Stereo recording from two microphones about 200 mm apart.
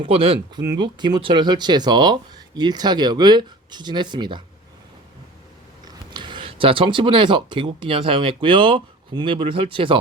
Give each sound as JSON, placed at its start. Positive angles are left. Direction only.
{"t": 0.0, "sound": "speech", "side_deg": -25}
{"t": 5.8, "sound": "speech", "side_deg": -20}